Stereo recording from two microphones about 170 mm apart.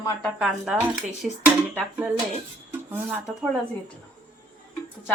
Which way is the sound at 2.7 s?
10° right (ahead or behind).